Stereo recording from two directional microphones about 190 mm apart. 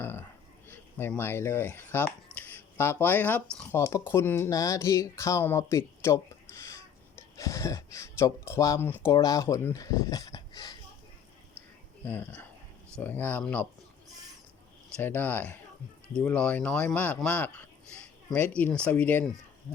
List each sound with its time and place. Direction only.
0.0 s a sound: 10° left (ahead or behind)
0.7 s speech: 10° left (ahead or behind)
12.0 s speech: 10° left (ahead or behind)
14.9 s speech: 10° left (ahead or behind)